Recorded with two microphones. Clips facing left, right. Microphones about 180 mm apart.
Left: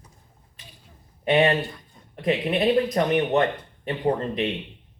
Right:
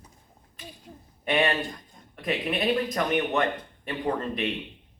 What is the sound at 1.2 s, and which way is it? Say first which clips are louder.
Speech: left 5 dB; 25° left (ahead or behind).